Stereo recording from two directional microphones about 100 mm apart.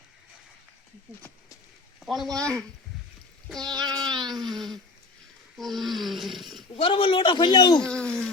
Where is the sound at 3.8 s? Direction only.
45° right (ahead or behind).